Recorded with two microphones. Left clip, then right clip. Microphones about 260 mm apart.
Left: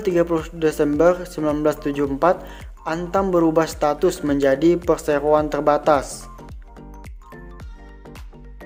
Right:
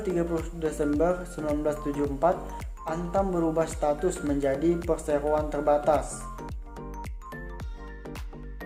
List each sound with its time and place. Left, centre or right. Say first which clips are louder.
0.0 s a man's voice: left 9 dB; left